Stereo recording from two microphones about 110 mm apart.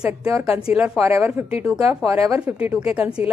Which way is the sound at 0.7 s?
10° right (ahead or behind).